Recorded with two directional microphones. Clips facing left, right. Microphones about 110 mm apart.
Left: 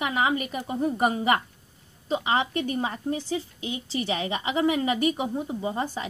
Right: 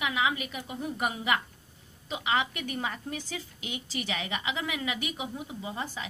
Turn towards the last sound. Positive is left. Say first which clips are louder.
# left 7 dB
turn(degrees=35)  # may be behind; listen again after turning